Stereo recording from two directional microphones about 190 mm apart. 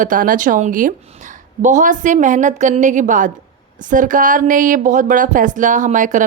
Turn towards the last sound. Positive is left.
turn(degrees=-40)  # may be behind; listen again after turning